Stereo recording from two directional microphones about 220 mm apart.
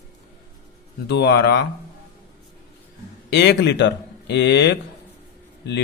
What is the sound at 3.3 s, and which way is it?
A man's voice, 50° left (ahead or behind).